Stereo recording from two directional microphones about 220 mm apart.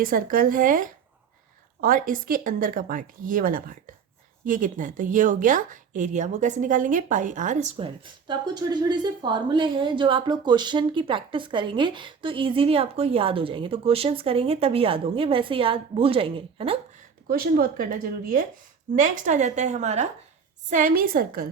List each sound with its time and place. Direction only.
0.0 s speech: 40° right (ahead or behind); by 16.7 s 25° right (ahead or behind)
17.2 s speech: 40° right (ahead or behind)
18.9 s speech: 35° right (ahead or behind)